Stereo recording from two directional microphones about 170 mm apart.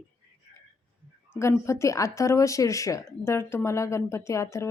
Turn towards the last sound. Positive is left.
turn(degrees=15)  # may be behind; listen again after turning